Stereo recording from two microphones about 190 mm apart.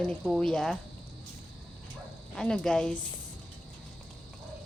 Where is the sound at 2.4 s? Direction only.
5° left (ahead or behind).